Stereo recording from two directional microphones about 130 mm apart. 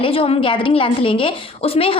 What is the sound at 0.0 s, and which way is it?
A woman's voice, 45° left (ahead or behind).